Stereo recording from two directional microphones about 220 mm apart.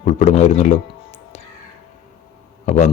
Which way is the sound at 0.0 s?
30° left (ahead or behind).